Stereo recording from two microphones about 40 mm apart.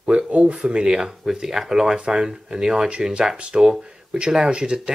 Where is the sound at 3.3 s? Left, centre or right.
Right.